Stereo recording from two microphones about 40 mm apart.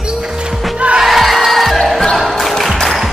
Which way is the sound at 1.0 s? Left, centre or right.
Centre.